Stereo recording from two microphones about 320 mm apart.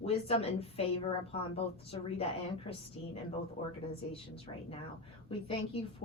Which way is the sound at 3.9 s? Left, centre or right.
Centre.